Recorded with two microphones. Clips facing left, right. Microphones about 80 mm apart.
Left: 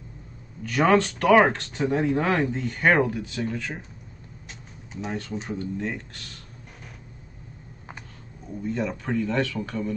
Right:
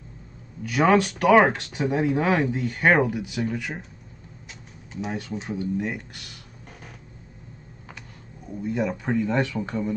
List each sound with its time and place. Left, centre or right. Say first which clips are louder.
0.7 s speech: right 1 dB; centre
5.0 s speech: right 1 dB; centre
8.5 s speech: right 2 dB; centre